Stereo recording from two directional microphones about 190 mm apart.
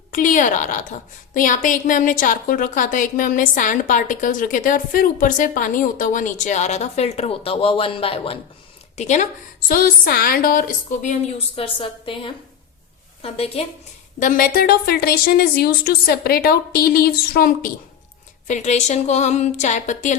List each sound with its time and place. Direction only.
0.1 s a woman's voice: 45° left (ahead or behind)
9.6 s a woman's voice: 50° left (ahead or behind)
11.5 s a woman's voice: 30° left (ahead or behind)
14.2 s a woman's voice: 45° left (ahead or behind)
18.4 s speech: 40° left (ahead or behind)